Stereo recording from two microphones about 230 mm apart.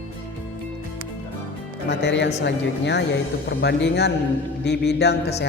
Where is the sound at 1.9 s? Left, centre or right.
Left.